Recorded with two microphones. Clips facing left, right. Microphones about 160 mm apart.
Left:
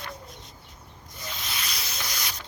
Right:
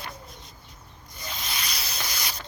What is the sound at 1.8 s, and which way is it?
Sanding, centre (ahead or behind).